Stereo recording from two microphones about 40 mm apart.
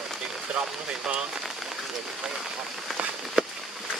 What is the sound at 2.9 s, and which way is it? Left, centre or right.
Rain on surface, centre.